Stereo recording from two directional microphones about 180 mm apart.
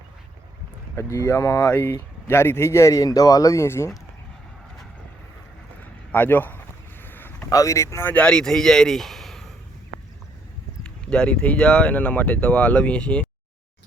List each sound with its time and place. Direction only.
1.1 s speech: 15° left (ahead or behind)
5.8 s a sound: 10° left (ahead or behind)
7.0 s speech: 10° left (ahead or behind)
10.8 s speech: 5° left (ahead or behind)